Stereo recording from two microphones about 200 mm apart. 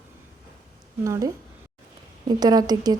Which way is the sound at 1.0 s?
15° right (ahead or behind).